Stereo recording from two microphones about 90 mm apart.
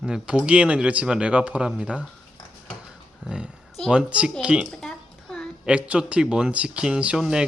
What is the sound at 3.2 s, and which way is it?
Speech, 10° right (ahead or behind).